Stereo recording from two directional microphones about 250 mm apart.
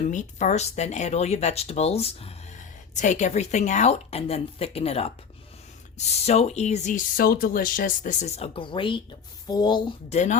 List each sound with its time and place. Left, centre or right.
0.1 s speech: left
6.2 s speech: left